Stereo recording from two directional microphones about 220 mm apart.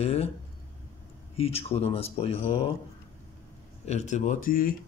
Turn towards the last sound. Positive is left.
turn(degrees=40)  # may be behind; listen again after turning